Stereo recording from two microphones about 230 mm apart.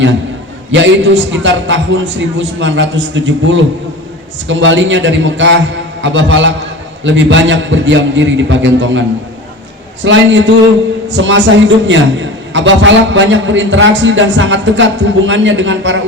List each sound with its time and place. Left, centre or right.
0.7 s a man's voice: right